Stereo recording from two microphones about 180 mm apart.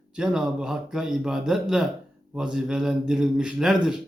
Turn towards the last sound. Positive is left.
turn(degrees=-5)  # may be behind; listen again after turning